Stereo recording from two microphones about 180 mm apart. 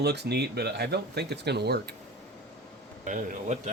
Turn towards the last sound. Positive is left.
turn(degrees=-45)  # may be behind; listen again after turning